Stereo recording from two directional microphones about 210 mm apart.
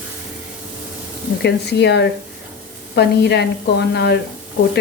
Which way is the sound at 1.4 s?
55° left (ahead or behind).